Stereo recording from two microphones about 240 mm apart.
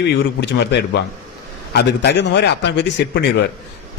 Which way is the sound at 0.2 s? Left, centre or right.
Left.